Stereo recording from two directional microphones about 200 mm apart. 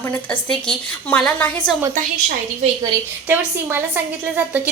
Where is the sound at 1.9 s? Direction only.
40° right (ahead or behind).